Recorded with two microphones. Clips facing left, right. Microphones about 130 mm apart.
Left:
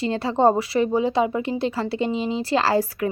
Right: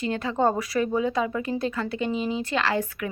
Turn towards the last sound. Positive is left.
turn(degrees=35)  # may be behind; listen again after turning